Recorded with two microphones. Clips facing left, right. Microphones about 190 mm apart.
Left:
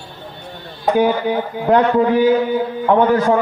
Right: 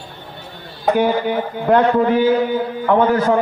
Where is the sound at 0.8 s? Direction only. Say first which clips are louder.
Left 1 dB; 15° left (ahead or behind).